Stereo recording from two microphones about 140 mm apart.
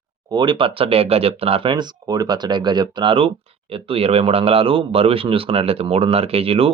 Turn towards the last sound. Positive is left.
turn(degrees=-45)  # may be behind; listen again after turning